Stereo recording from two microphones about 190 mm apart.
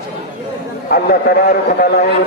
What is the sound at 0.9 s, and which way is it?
Speech, 55° left (ahead or behind).